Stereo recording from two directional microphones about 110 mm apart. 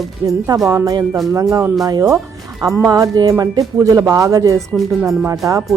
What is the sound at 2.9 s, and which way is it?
A woman's voice, 35° right (ahead or behind).